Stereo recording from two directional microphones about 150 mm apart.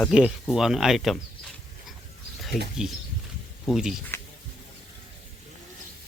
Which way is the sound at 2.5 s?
Centre (ahead or behind).